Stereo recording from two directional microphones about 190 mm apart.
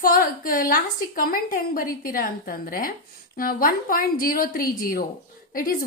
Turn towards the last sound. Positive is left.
turn(degrees=50)  # may be behind; listen again after turning